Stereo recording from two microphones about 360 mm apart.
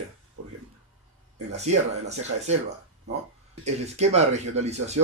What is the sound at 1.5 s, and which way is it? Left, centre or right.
Speech, centre.